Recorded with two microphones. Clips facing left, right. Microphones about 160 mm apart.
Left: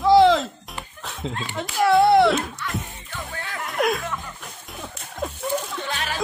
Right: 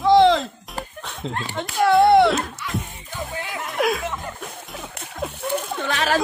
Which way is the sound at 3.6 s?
Centre (ahead or behind).